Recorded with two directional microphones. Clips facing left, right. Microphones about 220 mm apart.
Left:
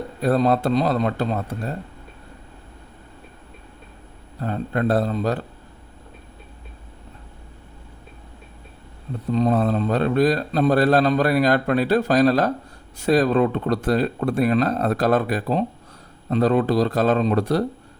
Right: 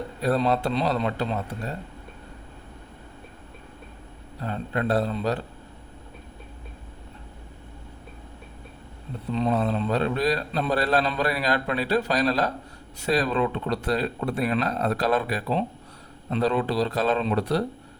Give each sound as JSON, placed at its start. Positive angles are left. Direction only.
{"t": 0.2, "sound": "a man's voice", "side_deg": 45}
{"t": 4.4, "sound": "a man's voice", "side_deg": 45}
{"t": 9.3, "sound": "a man's voice", "side_deg": 45}